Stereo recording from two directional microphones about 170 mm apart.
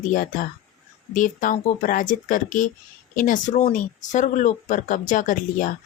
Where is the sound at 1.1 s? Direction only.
50° left (ahead or behind).